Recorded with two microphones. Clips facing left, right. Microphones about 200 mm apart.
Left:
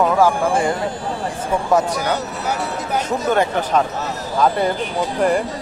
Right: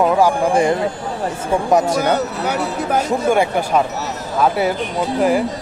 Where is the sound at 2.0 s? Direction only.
55° right (ahead or behind).